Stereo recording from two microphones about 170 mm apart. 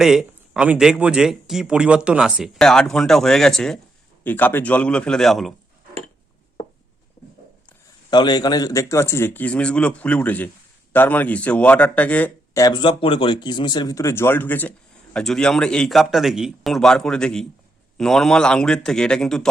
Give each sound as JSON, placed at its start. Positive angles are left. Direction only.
{"t": 0.0, "sound": "speech", "side_deg": -5}
{"t": 8.1, "sound": "speech", "side_deg": 25}
{"t": 12.5, "sound": "speech", "side_deg": 25}